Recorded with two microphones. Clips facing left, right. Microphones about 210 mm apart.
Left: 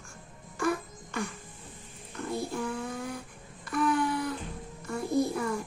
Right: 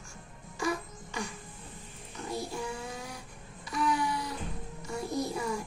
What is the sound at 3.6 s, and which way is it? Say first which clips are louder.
Wail: left 3 dB; 55° left (ahead or behind).